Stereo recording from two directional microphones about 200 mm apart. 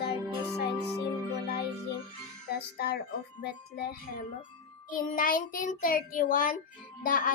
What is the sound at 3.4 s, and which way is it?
Music, 55° left (ahead or behind).